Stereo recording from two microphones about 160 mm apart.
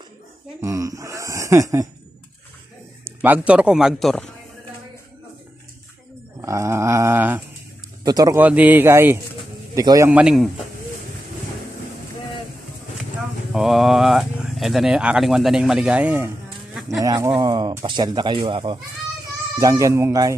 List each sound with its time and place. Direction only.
0.6 s a sound: 20° right (ahead or behind)
3.2 s speech: 10° right (ahead or behind)
6.4 s dog: 20° right (ahead or behind)
8.0 s speech: 25° right (ahead or behind)
8.4 s dog: 10° right (ahead or behind)
9.8 s speech: 20° right (ahead or behind)
10.1 s speech: 5° right (ahead or behind)
13.5 s speech: centre (ahead or behind)
16.9 s speech: 20° right (ahead or behind)